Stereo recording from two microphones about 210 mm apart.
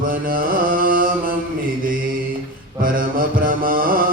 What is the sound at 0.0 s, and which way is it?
Carnatic music, 45° right (ahead or behind).